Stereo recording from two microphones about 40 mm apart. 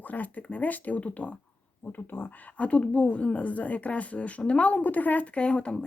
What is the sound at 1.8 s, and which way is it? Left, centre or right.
Speech, left.